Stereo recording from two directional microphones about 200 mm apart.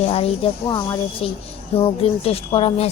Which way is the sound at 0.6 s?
20° left (ahead or behind).